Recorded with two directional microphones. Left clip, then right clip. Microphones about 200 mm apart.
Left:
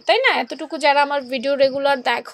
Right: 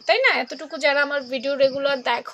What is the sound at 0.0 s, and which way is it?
A woman's voice, 35° left (ahead or behind).